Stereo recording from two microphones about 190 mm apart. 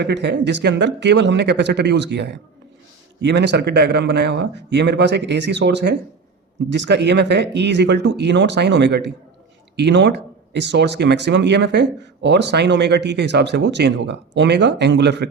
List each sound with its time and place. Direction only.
0.0 s speech: 65° right (ahead or behind)